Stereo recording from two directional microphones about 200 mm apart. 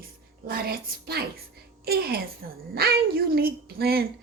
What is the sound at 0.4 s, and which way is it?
A woman's voice, 50° right (ahead or behind).